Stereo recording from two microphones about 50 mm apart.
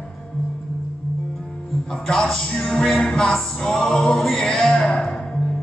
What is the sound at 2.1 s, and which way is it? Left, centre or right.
Music, centre.